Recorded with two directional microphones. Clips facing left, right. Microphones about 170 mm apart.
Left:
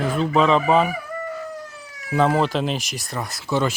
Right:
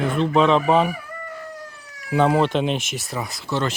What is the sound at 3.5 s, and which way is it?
Speech, 10° left (ahead or behind).